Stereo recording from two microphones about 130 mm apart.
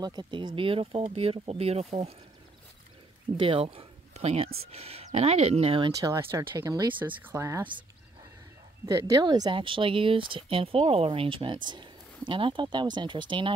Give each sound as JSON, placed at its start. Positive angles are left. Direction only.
{"t": 0.0, "sound": "speech", "side_deg": -35}
{"t": 3.3, "sound": "speech", "side_deg": -45}
{"t": 5.9, "sound": "speech", "side_deg": -25}
{"t": 7.0, "sound": "speech", "side_deg": -15}
{"t": 8.8, "sound": "speech", "side_deg": -30}